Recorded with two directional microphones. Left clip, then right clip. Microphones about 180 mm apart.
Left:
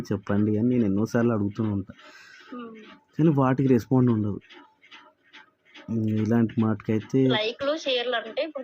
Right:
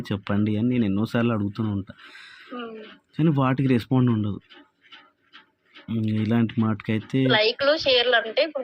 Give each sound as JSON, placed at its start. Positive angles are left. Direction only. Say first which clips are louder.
{"t": 0.0, "sound": "speech", "louder": "even", "side_deg": -50}
{"t": 3.8, "sound": "speech", "louder": "even", "side_deg": -35}
{"t": 5.9, "sound": "speech", "louder": "even", "side_deg": -45}